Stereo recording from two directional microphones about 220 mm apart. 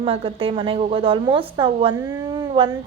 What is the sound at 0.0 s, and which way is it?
A woman's voice, 25° right (ahead or behind).